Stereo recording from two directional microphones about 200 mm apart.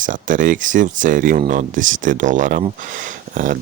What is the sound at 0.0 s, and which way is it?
Speech, 40° right (ahead or behind).